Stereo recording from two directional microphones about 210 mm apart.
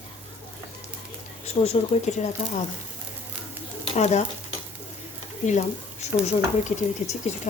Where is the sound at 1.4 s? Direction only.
30° left (ahead or behind).